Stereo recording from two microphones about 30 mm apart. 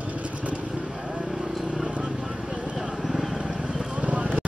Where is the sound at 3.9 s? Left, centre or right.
Right.